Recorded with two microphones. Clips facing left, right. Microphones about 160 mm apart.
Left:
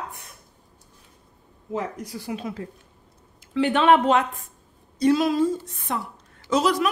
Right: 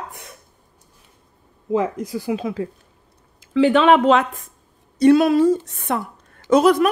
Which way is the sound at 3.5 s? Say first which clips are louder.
Right 4 dB; 90° right.